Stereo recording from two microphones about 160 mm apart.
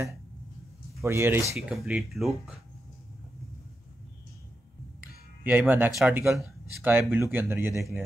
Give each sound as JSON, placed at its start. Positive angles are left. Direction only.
{"t": 1.0, "sound": "speech", "side_deg": -15}
{"t": 1.7, "sound": "speech", "side_deg": -5}
{"t": 5.4, "sound": "speech", "side_deg": -10}
{"t": 5.9, "sound": "speech", "side_deg": 0}
{"t": 6.1, "sound": "speech", "side_deg": -15}